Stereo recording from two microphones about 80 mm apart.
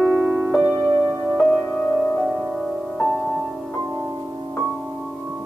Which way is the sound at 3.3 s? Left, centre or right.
Centre.